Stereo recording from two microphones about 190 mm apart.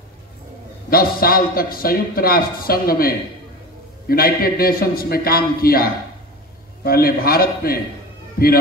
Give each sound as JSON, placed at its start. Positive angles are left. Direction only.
{"t": 0.8, "sound": "a man's voice", "side_deg": 50}
{"t": 4.1, "sound": "a man's voice", "side_deg": 50}